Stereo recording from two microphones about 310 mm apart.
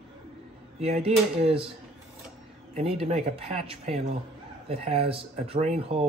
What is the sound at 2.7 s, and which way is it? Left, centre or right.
Speech, centre.